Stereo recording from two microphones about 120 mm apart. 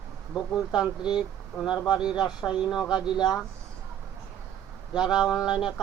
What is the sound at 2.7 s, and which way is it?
Speech, 5° right (ahead or behind).